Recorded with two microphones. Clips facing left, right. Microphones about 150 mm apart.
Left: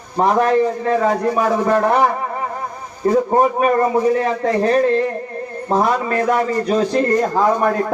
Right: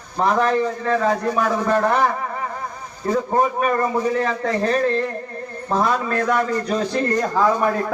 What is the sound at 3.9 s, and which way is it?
Speech, 5° left (ahead or behind).